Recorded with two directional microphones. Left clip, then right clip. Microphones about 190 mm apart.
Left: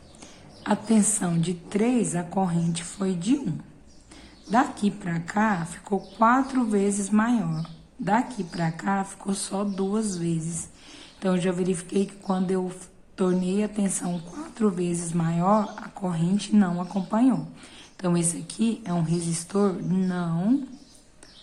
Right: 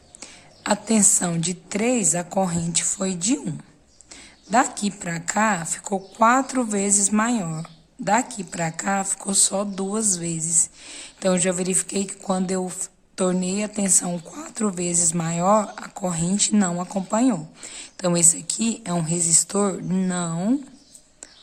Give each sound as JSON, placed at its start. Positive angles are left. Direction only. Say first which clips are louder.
{"t": 0.2, "sound": "speech", "louder": "right 5 dB", "side_deg": -35}
{"t": 4.5, "sound": "speech", "louder": "right 3 dB", "side_deg": -35}